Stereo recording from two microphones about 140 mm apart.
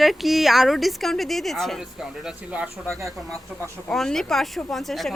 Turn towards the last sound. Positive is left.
turn(degrees=0)  # may be behind; listen again after turning